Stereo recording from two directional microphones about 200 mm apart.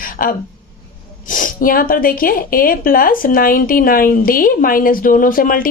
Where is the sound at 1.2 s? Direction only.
40° left (ahead or behind).